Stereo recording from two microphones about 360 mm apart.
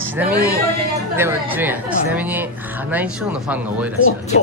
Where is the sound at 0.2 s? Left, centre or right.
Centre.